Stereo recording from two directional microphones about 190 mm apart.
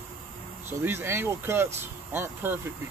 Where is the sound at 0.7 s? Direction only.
15° right (ahead or behind).